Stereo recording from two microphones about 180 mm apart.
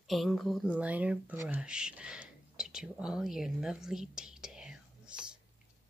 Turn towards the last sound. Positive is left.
turn(degrees=-5)  # may be behind; listen again after turning